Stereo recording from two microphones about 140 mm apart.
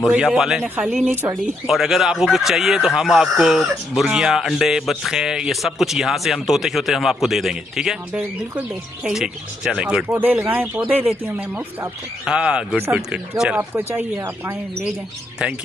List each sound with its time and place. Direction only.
0.1 s speech: 5° right (ahead or behind)
1.7 s speech: centre (ahead or behind)
13.6 s speech: 15° right (ahead or behind)